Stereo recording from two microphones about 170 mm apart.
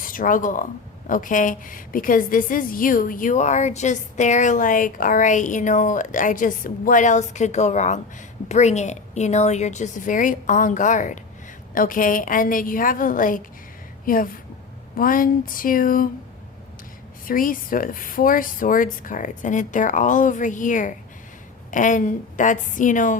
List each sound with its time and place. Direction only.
0.0 s a woman's voice: 55° left (ahead or behind)
17.2 s a woman's voice: 55° left (ahead or behind)